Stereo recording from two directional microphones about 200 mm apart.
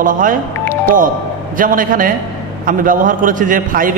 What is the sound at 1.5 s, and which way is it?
A man's voice, 45° right (ahead or behind).